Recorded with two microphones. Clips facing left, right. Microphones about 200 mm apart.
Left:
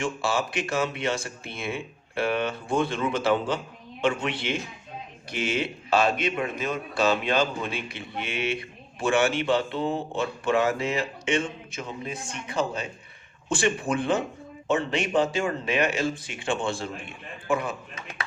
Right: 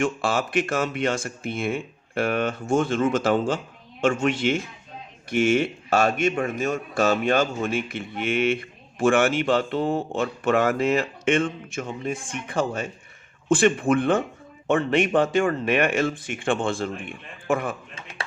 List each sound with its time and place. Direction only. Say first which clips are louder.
0.0 s speech: right 3 dB; 50° right (ahead or behind)